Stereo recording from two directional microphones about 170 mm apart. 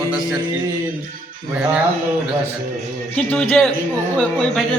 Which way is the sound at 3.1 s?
5° left (ahead or behind).